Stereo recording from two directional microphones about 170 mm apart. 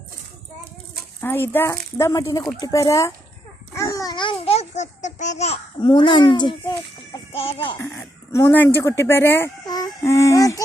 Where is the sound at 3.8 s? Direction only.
20° left (ahead or behind); by 5.9 s 40° left (ahead or behind).